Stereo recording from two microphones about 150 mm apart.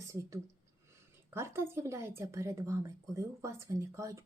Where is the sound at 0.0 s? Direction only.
20° right (ahead or behind).